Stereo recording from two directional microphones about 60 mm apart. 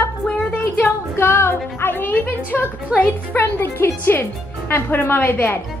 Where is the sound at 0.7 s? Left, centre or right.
Left.